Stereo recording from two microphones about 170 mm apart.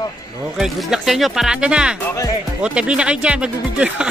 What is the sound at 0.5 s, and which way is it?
Speech, centre (ahead or behind).